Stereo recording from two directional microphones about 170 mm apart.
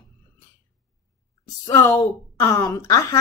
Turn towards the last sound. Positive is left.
turn(degrees=20)  # may be behind; listen again after turning